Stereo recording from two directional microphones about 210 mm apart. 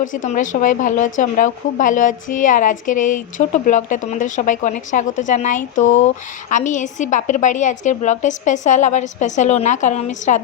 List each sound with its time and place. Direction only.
0.0 s a woman's voice: 35° left (ahead or behind)